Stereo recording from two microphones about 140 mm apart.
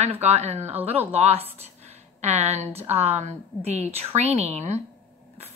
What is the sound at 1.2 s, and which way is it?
A woman's voice, 45° right (ahead or behind).